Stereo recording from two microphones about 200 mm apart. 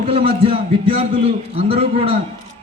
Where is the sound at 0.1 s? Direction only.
25° right (ahead or behind).